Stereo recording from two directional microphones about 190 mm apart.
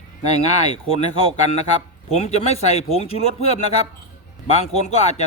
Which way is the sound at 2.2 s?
35° left (ahead or behind).